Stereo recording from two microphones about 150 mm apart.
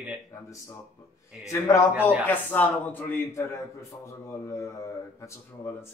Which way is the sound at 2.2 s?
10° left (ahead or behind).